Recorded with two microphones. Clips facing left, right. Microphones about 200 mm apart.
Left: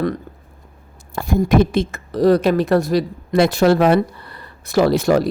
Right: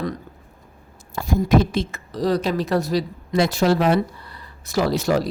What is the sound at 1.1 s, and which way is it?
Speech, 55° left (ahead or behind).